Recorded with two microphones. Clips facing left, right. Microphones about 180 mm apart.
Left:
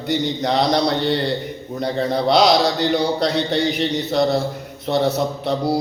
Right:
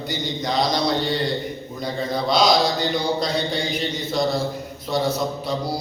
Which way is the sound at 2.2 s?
65° left (ahead or behind).